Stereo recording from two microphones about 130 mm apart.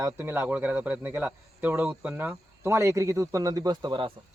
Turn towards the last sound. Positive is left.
turn(degrees=-35)  # may be behind; listen again after turning